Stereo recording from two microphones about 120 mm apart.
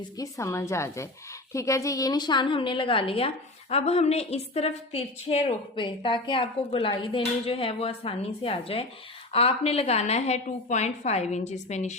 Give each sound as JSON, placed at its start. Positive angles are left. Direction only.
{"t": 0.2, "sound": "a woman's voice", "side_deg": 25}
{"t": 5.7, "sound": "a woman's voice", "side_deg": 45}